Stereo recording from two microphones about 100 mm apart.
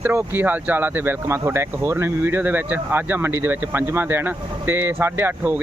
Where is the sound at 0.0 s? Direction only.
25° right (ahead or behind).